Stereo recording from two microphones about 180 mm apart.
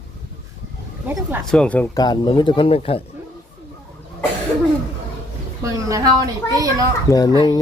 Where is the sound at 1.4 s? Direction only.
5° left (ahead or behind).